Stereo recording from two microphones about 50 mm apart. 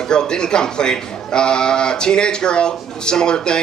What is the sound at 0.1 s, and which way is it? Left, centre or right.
Speech, centre.